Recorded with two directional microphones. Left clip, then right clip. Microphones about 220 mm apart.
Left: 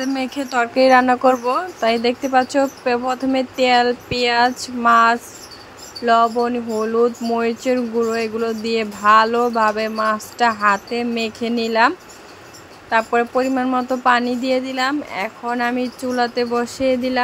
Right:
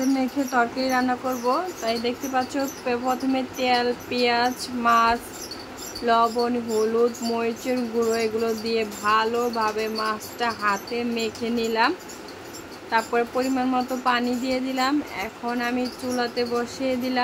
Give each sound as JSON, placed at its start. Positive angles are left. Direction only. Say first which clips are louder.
{"t": 0.0, "sound": "speech", "louder": "left 1 dB", "side_deg": 30}
{"t": 12.9, "sound": "speech", "louder": "left 6 dB", "side_deg": 25}